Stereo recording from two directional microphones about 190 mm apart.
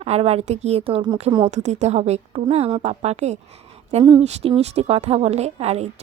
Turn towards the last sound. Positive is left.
turn(degrees=-35)  # may be behind; listen again after turning